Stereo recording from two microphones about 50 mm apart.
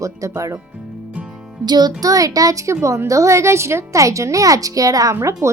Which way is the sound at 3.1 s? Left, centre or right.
Right.